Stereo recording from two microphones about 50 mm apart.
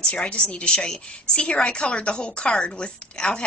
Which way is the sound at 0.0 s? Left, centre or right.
Left.